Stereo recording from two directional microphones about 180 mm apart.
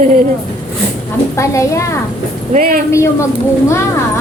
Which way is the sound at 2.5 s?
50° right (ahead or behind).